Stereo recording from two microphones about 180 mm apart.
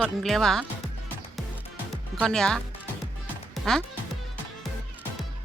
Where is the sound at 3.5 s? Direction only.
5° left (ahead or behind).